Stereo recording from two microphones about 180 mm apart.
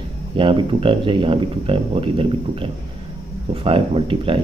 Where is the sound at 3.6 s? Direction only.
30° right (ahead or behind).